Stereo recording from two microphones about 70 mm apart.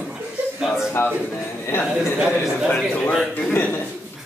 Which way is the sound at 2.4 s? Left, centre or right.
Centre.